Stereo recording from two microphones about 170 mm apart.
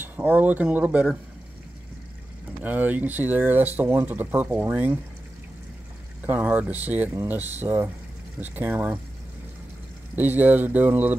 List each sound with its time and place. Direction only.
0.0 s speech: 10° right (ahead or behind)
2.6 s speech: 10° right (ahead or behind)
6.2 s speech: 10° right (ahead or behind)
10.1 s speech: 10° right (ahead or behind)